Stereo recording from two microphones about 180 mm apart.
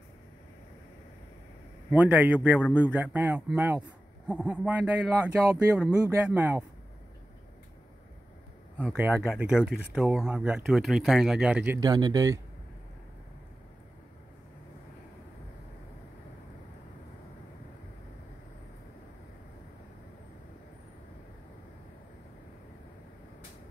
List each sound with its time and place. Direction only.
1.9 s a man's voice: 10° right (ahead or behind)
8.9 s a man's voice: 10° right (ahead or behind)
11.8 s speech: 20° right (ahead or behind)